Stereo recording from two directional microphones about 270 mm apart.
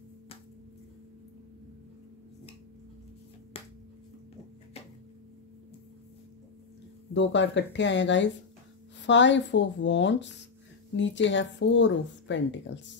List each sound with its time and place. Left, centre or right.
7.2 s speech: left